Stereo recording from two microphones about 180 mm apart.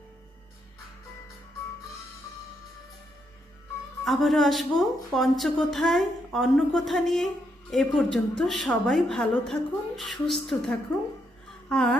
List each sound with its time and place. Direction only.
4.0 s a woman's voice: centre (ahead or behind)